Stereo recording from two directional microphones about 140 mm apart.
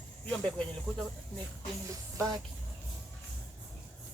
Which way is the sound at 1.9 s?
25° right (ahead or behind).